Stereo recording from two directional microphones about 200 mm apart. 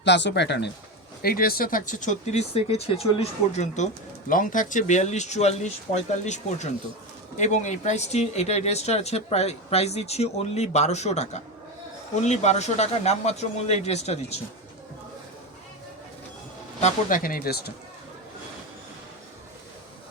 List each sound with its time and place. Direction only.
0.0 s speech: 60° left (ahead or behind)
1.2 s speech: 50° left (ahead or behind)
16.8 s speech: 40° left (ahead or behind)